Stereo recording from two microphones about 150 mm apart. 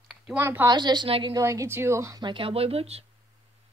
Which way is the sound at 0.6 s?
30° right (ahead or behind).